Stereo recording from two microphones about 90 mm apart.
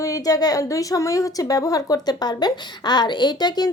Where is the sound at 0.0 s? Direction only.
40° left (ahead or behind).